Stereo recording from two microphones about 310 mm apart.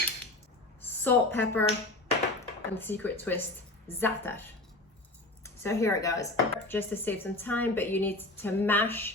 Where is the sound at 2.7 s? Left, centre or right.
Centre.